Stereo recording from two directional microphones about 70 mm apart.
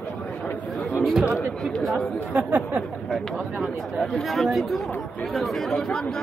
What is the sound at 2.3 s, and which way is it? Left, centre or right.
Speech, right.